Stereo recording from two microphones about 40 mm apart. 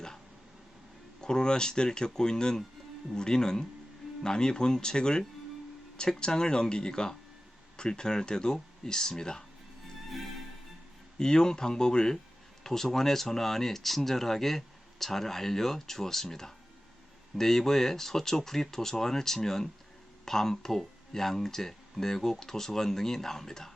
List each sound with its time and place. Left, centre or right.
1.2 s speech: centre
11.2 s speech: centre